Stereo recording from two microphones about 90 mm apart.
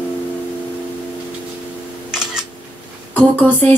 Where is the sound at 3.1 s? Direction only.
20° left (ahead or behind).